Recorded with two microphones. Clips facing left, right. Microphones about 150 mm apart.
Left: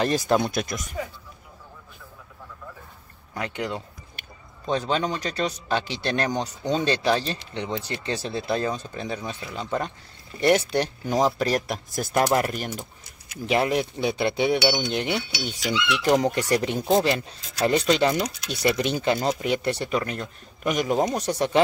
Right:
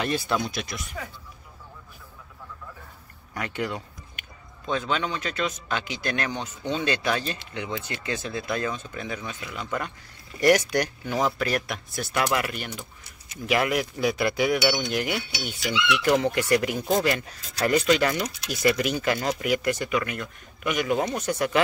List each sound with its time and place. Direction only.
0.0 s speech: 40° left (ahead or behind)
3.3 s speech: 20° left (ahead or behind)
4.2 s speech: 35° left (ahead or behind)